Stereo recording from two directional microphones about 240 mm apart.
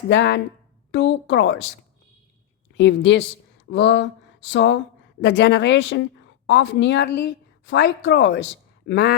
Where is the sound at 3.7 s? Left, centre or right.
Left.